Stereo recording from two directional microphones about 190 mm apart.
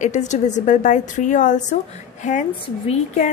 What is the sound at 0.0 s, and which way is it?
A woman's voice, 40° left (ahead or behind).